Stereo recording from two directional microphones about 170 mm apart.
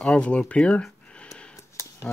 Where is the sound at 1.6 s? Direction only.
15° left (ahead or behind).